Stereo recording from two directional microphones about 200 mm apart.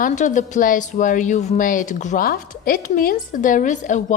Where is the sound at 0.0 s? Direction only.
40° left (ahead or behind).